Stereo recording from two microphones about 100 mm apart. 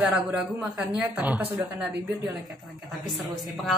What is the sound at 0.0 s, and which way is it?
A man's voice, 10° right (ahead or behind).